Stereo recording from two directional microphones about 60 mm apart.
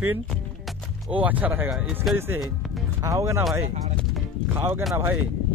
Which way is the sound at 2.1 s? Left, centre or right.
Right.